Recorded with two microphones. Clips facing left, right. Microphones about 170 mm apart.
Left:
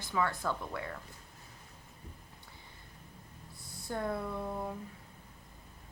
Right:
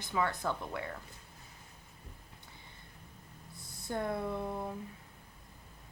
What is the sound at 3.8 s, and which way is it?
Speech, 25° right (ahead or behind).